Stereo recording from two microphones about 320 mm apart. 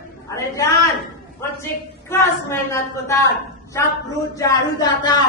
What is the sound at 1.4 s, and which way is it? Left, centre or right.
A woman's voice, centre.